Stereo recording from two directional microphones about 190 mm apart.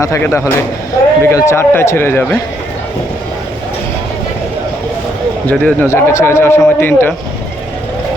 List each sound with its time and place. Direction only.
0.0 s speech: 15° left (ahead or behind)
5.5 s speech: 10° left (ahead or behind)